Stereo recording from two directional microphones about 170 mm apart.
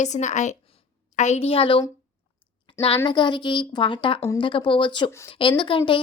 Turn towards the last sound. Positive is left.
turn(degrees=30)  # may be behind; listen again after turning